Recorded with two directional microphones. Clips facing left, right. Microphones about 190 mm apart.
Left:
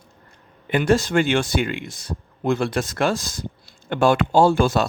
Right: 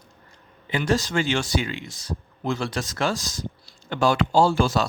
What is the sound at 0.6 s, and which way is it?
Speech, 55° left (ahead or behind).